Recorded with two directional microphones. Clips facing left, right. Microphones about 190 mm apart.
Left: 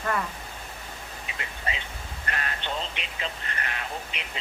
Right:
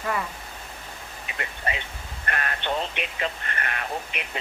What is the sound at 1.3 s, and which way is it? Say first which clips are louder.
Vehicle: right 5 dB; 60° right (ahead or behind).